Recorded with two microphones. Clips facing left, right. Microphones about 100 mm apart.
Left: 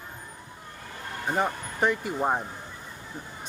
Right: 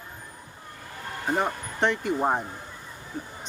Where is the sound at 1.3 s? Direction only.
5° left (ahead or behind).